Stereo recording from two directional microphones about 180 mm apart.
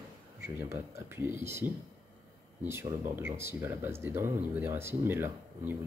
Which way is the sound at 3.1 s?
15° right (ahead or behind).